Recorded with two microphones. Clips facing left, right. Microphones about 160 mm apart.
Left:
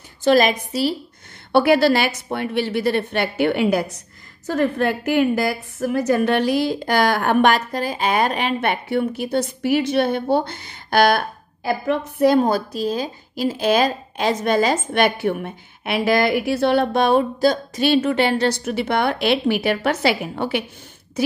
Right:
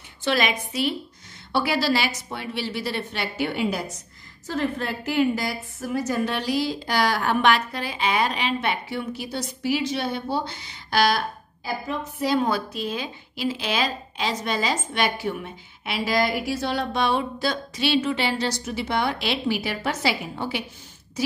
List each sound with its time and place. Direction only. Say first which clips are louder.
0.2 s a woman's voice: left 8 dB; 40° left (ahead or behind)
1.5 s speech: left 8 dB; 55° left (ahead or behind)
12.4 s speech: left 6 dB; 40° left (ahead or behind); by 20.6 s 60° left (ahead or behind)